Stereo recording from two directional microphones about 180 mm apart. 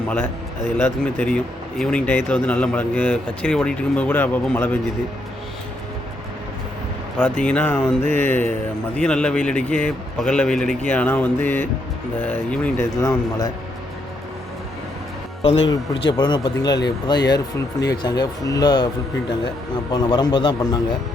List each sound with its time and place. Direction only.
0.1 s speech: 5° left (ahead or behind)
7.2 s a man's voice: 5° left (ahead or behind)
15.7 s speech: 25° left (ahead or behind)
19.9 s speech: 25° left (ahead or behind)